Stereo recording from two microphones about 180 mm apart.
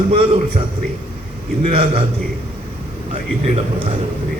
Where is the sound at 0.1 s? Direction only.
30° right (ahead or behind).